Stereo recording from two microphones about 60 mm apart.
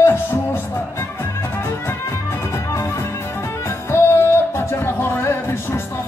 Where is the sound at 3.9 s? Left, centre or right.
Left.